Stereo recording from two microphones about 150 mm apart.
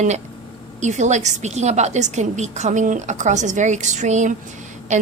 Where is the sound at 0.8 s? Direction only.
50° right (ahead or behind).